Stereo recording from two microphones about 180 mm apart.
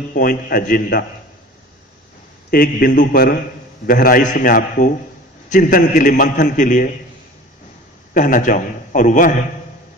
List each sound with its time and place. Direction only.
0.1 s a man's voice: 55° left (ahead or behind)
2.5 s a man's voice: 55° left (ahead or behind)
8.1 s a man's voice: 45° left (ahead or behind)